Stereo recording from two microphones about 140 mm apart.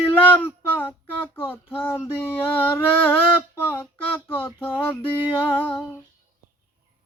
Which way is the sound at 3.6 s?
15° left (ahead or behind).